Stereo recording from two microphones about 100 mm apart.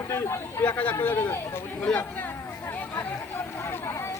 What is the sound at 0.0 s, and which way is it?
Speech, 30° left (ahead or behind).